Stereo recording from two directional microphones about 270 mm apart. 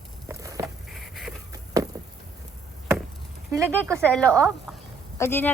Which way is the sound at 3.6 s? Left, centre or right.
Centre.